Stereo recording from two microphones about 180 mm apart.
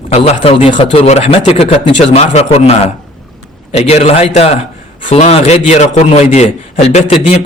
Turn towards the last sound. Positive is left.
turn(degrees=35)  # may be behind; listen again after turning